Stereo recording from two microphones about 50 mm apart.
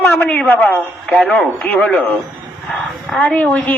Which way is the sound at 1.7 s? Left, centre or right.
Left.